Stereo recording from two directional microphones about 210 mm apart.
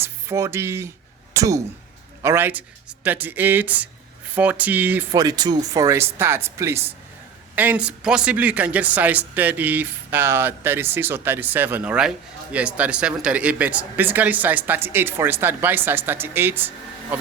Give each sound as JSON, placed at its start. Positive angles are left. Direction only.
{"t": 0.0, "sound": "speech", "side_deg": -15}